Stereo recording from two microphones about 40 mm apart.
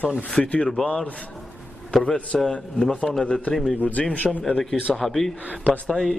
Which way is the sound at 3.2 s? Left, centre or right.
Left.